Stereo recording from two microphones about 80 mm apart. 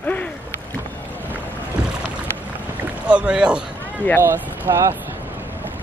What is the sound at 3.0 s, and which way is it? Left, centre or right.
Speech, centre.